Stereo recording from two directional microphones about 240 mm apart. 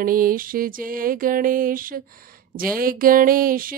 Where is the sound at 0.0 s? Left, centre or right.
Right.